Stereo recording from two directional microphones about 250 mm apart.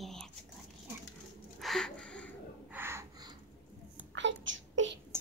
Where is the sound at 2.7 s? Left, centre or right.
Centre.